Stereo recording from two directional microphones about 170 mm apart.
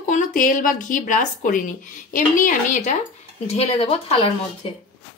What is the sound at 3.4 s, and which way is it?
Speech, 35° left (ahead or behind).